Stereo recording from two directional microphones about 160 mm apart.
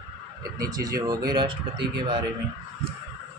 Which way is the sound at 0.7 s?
20° right (ahead or behind).